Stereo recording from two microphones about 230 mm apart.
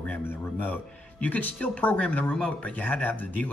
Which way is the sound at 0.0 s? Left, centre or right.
Centre.